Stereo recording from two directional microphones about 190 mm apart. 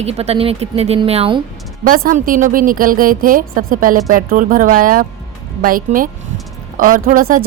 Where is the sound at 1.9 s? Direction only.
45° right (ahead or behind).